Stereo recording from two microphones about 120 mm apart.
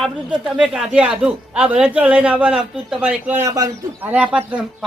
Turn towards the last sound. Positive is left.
turn(degrees=-10)  # may be behind; listen again after turning